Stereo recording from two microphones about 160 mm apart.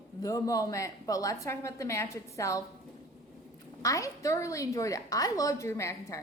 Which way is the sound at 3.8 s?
20° left (ahead or behind).